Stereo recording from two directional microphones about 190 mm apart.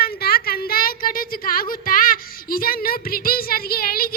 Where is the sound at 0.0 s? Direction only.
55° left (ahead or behind).